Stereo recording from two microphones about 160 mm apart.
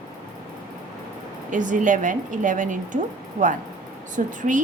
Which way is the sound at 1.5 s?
55° right (ahead or behind).